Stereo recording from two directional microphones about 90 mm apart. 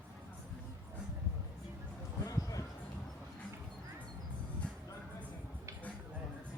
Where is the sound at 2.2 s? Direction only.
40° left (ahead or behind).